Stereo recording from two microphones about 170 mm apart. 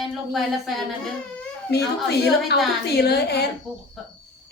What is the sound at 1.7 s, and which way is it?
A woman's voice, 70° left (ahead or behind).